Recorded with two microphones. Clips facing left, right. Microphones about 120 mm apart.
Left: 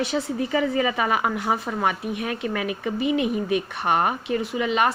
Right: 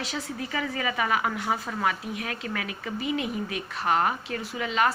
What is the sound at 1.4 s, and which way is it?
Speech, 40° left (ahead or behind).